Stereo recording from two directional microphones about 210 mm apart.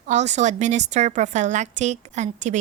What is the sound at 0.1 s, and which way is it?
A woman's voice, 35° right (ahead or behind).